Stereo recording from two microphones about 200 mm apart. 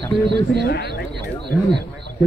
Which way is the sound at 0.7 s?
55° left (ahead or behind).